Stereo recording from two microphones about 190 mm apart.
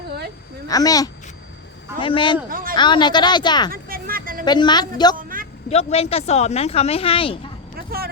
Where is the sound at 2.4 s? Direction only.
50° right (ahead or behind).